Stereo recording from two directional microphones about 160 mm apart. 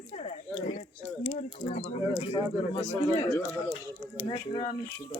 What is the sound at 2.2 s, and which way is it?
Speech, 35° left (ahead or behind).